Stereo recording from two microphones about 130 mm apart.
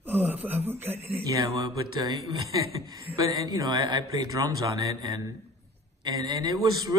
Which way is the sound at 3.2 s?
30° right (ahead or behind).